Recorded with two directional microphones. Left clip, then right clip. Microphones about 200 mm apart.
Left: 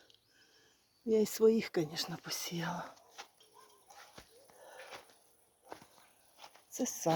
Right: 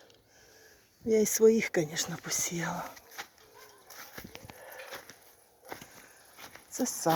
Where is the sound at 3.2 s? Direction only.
35° right (ahead or behind).